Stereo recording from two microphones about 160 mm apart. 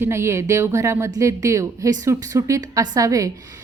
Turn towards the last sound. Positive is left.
turn(degrees=-20)  # may be behind; listen again after turning